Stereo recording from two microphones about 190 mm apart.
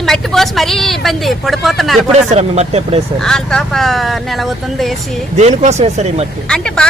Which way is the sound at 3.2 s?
5° left (ahead or behind).